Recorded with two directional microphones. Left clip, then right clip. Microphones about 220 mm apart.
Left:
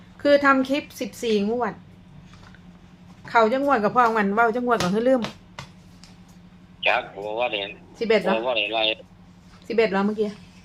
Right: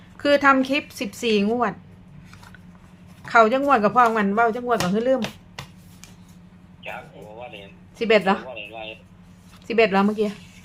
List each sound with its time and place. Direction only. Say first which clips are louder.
0.2 s speech: even; 10° right (ahead or behind)
3.2 s speech: right 3 dB; 10° right (ahead or behind)
6.8 s speech: left 13 dB; 55° left (ahead or behind)
7.9 s speech: right 2 dB; 10° right (ahead or behind)
8.4 s speech: left 12 dB; 55° left (ahead or behind)
9.6 s speech: right 3 dB; 10° right (ahead or behind)